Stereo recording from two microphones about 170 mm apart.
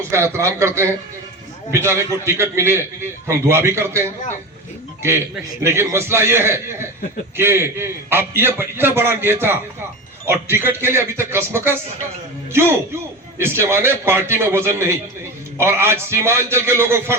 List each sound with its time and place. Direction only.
0.1 s a man's voice: 15° right (ahead or behind)
5.6 s a man's voice: 15° right (ahead or behind)
13.4 s a man's voice: 15° right (ahead or behind)